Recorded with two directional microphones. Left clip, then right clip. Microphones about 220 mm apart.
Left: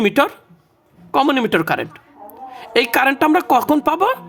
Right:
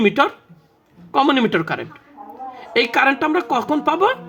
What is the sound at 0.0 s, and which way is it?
Speech, 35° left (ahead or behind).